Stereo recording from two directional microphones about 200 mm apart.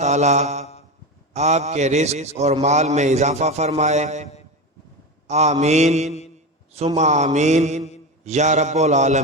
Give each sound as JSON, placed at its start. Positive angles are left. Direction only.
{"t": 0.0, "sound": "mantra", "side_deg": -35}
{"t": 1.3, "sound": "a man's voice", "side_deg": -35}
{"t": 5.3, "sound": "a man's voice", "side_deg": -35}